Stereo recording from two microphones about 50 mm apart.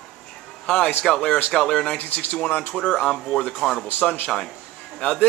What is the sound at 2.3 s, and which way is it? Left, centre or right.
A man's voice, left.